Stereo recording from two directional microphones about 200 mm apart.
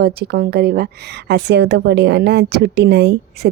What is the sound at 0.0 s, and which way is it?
A woman's voice, 50° right (ahead or behind).